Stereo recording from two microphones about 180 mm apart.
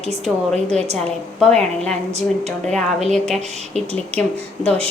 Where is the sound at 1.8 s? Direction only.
35° right (ahead or behind).